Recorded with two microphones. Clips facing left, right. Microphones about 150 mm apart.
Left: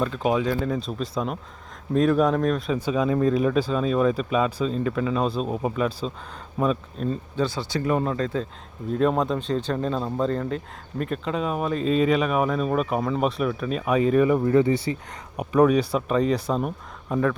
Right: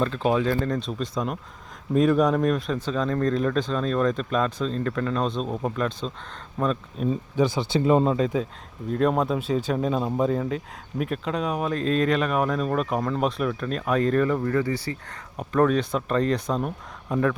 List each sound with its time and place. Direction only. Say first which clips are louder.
0.0 s speech: even; 10° left (ahead or behind)
2.7 s speech: left 3 dB; 10° left (ahead or behind)
7.0 s speech: right 5 dB; 10° right (ahead or behind)
8.9 s speech: even; centre (ahead or behind)